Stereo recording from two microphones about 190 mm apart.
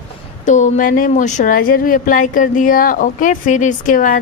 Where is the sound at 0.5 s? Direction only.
45° left (ahead or behind).